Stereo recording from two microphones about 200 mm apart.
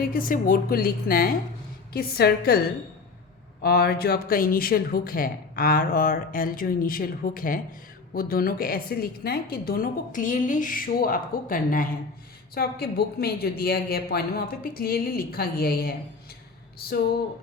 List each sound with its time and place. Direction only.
0.0 s speech: 45° left (ahead or behind)
3.6 s speech: 50° left (ahead or behind)